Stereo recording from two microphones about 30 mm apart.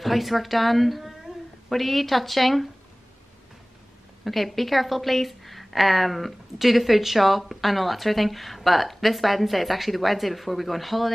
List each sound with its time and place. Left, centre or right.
0.0 s a woman's voice: centre
4.2 s a woman's voice: centre